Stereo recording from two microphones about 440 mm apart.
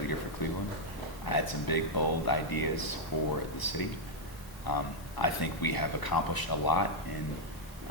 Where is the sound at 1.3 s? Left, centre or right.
Left.